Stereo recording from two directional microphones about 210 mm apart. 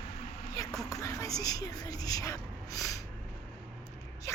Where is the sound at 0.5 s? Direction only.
15° left (ahead or behind).